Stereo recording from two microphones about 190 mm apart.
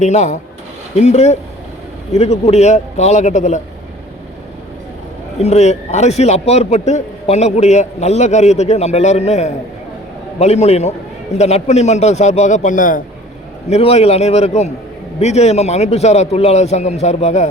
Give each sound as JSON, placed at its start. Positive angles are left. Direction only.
{"t": 0.0, "sound": "a man's voice", "side_deg": 35}
{"t": 5.4, "sound": "a man's voice", "side_deg": 35}